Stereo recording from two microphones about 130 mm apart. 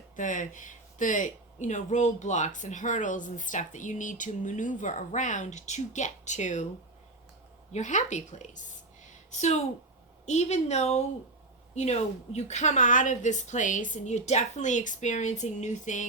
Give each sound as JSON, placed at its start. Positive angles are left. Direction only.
{"t": 0.2, "sound": "speech", "side_deg": 80}
{"t": 7.7, "sound": "a woman's voice", "side_deg": 65}